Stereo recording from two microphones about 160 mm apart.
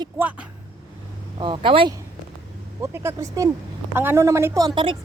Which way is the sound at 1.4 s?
30° right (ahead or behind).